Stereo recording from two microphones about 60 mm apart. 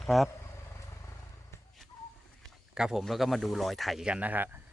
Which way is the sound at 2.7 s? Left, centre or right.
Centre.